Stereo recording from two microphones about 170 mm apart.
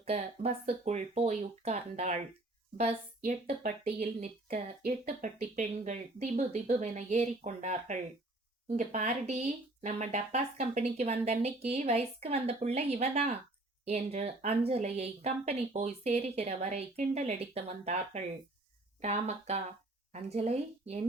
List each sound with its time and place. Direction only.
0.0 s speech: 40° right (ahead or behind)